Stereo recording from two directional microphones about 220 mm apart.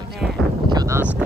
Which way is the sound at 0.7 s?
15° right (ahead or behind).